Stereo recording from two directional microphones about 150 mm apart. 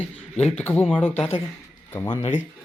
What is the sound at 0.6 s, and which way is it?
Speech, 10° left (ahead or behind).